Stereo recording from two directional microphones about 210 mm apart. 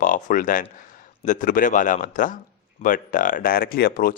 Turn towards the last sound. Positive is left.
turn(degrees=45)  # may be behind; listen again after turning